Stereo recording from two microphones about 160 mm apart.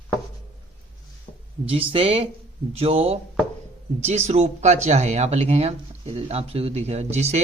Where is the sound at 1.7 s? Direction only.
35° right (ahead or behind).